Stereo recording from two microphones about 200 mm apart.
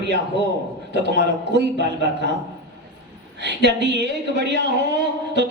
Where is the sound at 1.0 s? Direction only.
55° right (ahead or behind).